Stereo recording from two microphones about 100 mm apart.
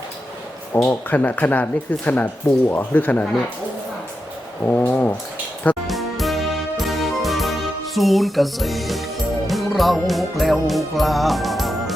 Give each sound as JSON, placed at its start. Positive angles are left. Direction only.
{"t": 0.9, "sound": "speech", "side_deg": 15}
{"t": 4.6, "sound": "brass instrument", "side_deg": 20}
{"t": 5.9, "sound": "music", "side_deg": 0}
{"t": 7.9, "sound": "speech", "side_deg": 0}
{"t": 9.5, "sound": "music", "side_deg": 0}